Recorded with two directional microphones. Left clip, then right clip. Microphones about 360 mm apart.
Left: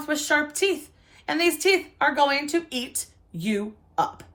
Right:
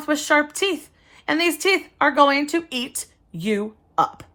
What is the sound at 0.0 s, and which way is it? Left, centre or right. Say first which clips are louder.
Speech: right 4 dB; right.